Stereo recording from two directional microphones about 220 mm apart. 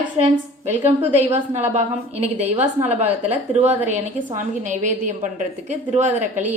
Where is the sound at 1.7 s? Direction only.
30° right (ahead or behind).